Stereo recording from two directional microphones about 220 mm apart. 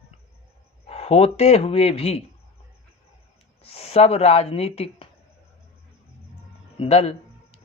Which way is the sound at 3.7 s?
25° left (ahead or behind).